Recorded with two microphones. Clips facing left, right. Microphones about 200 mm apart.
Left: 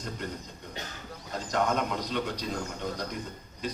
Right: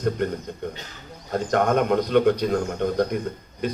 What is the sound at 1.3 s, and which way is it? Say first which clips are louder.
A man's voice: right 8 dB; 55° right (ahead or behind).